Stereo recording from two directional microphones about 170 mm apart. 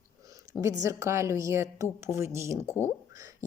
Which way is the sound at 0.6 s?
15° right (ahead or behind).